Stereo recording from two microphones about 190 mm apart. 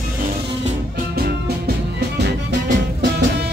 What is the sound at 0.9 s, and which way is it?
Music, 55° right (ahead or behind).